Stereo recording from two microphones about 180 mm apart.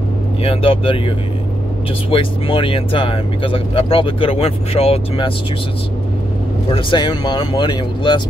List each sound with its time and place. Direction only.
0.4 s speech: 30° left (ahead or behind)
6.7 s speech: 25° left (ahead or behind)